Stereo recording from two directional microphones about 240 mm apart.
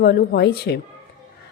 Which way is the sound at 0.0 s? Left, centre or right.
Left.